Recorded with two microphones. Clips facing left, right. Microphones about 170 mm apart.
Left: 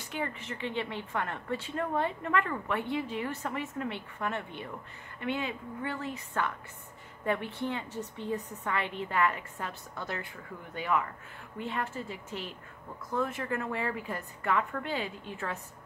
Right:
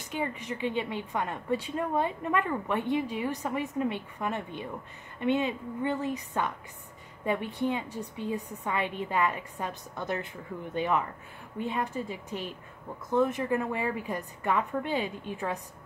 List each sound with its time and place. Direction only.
0.1 s a woman's voice: 15° right (ahead or behind)